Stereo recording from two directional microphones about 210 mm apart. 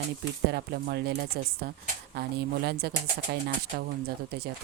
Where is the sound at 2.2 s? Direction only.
50° right (ahead or behind).